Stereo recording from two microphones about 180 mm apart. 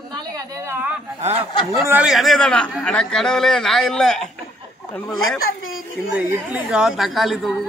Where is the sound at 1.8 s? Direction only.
5° right (ahead or behind).